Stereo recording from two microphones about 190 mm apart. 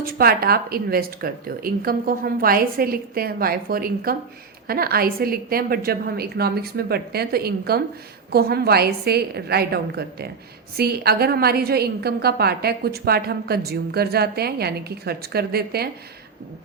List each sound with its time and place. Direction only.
0.0 s a woman's voice: 50° right (ahead or behind)